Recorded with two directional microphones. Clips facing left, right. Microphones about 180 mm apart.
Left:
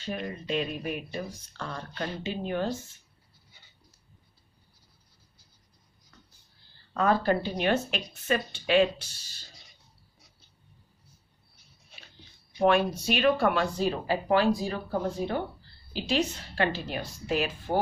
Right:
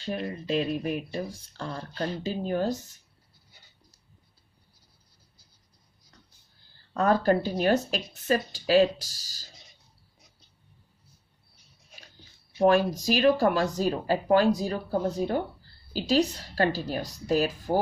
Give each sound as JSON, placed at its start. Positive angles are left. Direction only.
{"t": 0.0, "sound": "speech", "side_deg": -35}
{"t": 6.9, "sound": "speech", "side_deg": -40}
{"t": 12.6, "sound": "speech", "side_deg": -35}